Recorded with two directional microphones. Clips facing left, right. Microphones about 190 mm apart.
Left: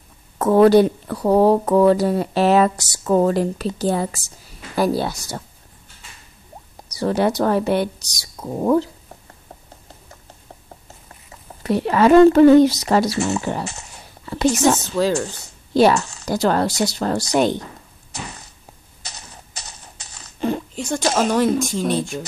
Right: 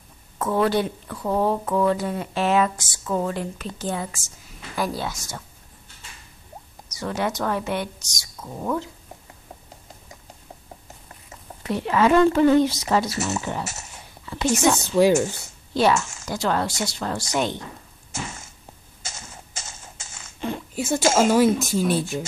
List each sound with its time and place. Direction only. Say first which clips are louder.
0.4 s a woman's voice: left 9 dB; 40° left (ahead or behind)
6.9 s a woman's voice: left 7 dB; 35° left (ahead or behind)
11.6 s a woman's voice: left 4 dB; 40° left (ahead or behind)
14.8 s speech: right 2 dB; 15° right (ahead or behind)
15.7 s a woman's voice: left 5 dB; 40° left (ahead or behind)
18.1 s a sound: even; 25° right (ahead or behind)
20.3 s a sound: left 7 dB; 40° left (ahead or behind)
20.7 s speech: right 1 dB; 5° right (ahead or behind)
21.0 s speech: right 1 dB; 25° right (ahead or behind)
21.3 s speech: even; 5° right (ahead or behind)